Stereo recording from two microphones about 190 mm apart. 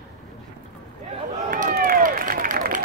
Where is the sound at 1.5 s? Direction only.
50° right (ahead or behind).